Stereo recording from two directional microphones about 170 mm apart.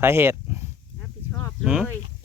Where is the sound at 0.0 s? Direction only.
15° right (ahead or behind).